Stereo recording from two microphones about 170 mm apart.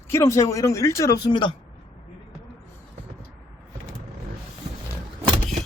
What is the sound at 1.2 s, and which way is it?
Speech, 30° left (ahead or behind).